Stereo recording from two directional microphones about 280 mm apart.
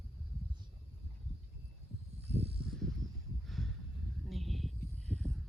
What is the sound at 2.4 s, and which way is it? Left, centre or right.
Snake, right.